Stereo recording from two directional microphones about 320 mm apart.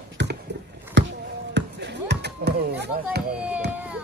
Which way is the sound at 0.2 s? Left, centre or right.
Right.